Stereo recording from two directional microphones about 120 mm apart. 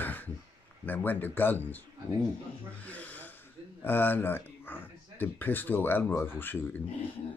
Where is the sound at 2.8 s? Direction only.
10° left (ahead or behind).